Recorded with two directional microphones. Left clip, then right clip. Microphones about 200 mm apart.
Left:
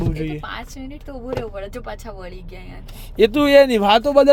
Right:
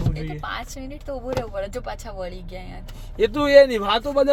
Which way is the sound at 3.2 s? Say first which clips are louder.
Left 2 dB; 40° left (ahead or behind).